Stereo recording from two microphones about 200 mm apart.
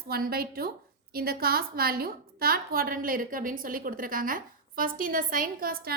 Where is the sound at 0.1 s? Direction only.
50° right (ahead or behind).